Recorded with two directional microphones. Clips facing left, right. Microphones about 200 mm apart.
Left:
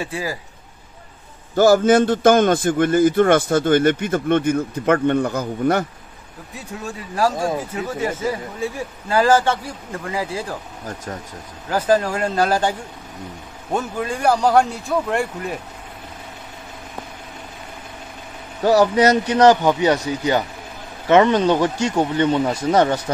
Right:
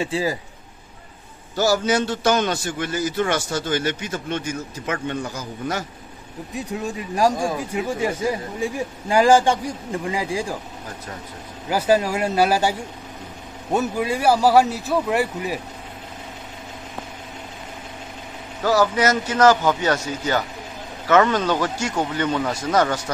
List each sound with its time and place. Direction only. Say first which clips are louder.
0.0 s speech: right 3 dB; 25° right (ahead or behind)
1.5 s a man's voice: left 7 dB; 50° left (ahead or behind)
6.5 s a man's voice: right 4 dB; 15° right (ahead or behind)
11.7 s a man's voice: left 1 dB; 10° right (ahead or behind)
18.6 s speech: left 4 dB; 20° left (ahead or behind)